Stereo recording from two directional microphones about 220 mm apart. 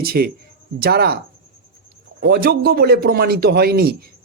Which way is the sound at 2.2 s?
45° right (ahead or behind).